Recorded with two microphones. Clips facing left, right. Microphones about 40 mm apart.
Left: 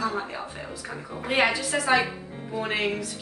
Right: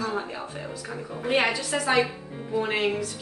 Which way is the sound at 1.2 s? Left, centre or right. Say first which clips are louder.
Left 1 dB; centre.